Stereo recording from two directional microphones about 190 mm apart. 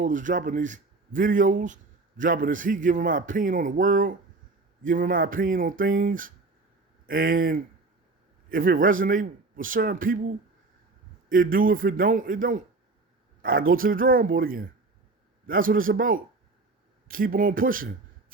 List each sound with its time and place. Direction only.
0.0 s speech: 45° right (ahead or behind)
11.3 s speech: 45° right (ahead or behind)